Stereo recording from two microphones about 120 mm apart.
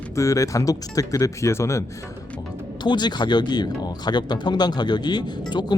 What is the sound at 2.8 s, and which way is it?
Speech, 35° left (ahead or behind).